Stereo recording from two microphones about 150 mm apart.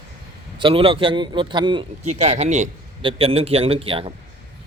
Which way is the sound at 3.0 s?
40° right (ahead or behind).